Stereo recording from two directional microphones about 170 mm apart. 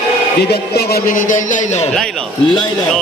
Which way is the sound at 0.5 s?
70° left (ahead or behind).